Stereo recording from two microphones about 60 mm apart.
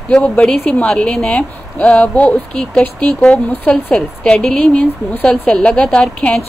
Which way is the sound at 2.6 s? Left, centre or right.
Centre.